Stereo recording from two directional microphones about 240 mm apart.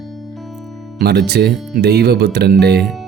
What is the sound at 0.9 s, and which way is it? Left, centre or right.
Speech, right.